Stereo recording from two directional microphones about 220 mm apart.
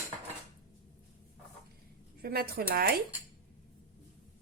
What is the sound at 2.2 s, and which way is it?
Speech, 45° right (ahead or behind).